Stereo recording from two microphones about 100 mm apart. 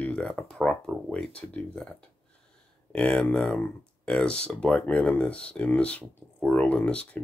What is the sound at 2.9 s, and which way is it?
Speech, 5° left (ahead or behind).